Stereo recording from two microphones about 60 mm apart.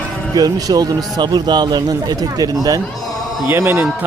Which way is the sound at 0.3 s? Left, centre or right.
Right.